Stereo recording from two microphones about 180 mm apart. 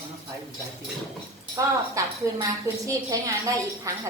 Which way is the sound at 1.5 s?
15° right (ahead or behind).